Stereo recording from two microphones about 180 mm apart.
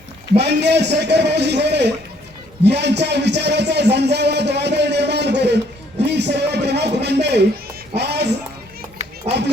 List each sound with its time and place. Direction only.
0.3 s a man's voice: 70° right (ahead or behind)
6.1 s music: 75° right (ahead or behind)
9.3 s run: 35° right (ahead or behind)